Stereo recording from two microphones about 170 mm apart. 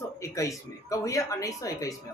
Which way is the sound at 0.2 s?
20° left (ahead or behind).